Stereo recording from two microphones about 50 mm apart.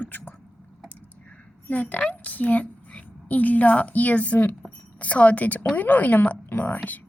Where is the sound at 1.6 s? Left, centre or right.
Left.